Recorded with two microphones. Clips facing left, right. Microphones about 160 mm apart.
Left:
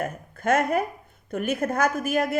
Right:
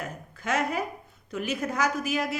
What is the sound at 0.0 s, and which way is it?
A woman's voice, 55° left (ahead or behind).